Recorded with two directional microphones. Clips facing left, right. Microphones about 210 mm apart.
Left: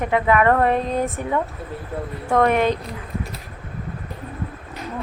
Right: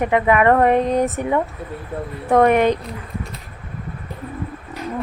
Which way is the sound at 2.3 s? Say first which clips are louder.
Right 4 dB; 15° right (ahead or behind).